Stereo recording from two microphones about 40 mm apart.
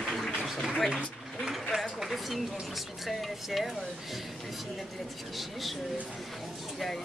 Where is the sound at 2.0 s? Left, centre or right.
Centre.